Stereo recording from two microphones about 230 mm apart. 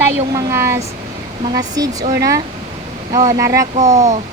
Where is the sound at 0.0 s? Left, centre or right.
Centre.